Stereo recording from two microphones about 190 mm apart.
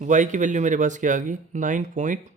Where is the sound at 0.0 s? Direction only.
40° right (ahead or behind).